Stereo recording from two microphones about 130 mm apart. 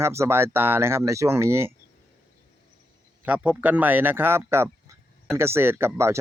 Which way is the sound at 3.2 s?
10° right (ahead or behind).